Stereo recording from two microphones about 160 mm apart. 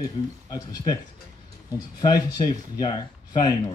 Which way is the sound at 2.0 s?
25° left (ahead or behind).